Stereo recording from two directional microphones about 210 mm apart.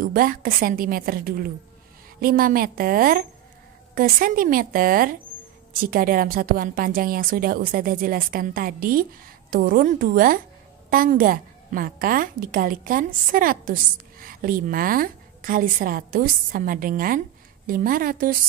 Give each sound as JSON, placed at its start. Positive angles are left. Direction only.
{"t": 0.0, "sound": "a woman's voice", "side_deg": -40}